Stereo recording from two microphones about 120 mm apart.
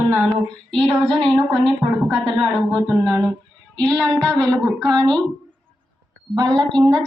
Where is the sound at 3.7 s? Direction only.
10° left (ahead or behind).